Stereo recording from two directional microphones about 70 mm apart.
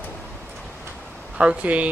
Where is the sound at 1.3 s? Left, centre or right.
Centre.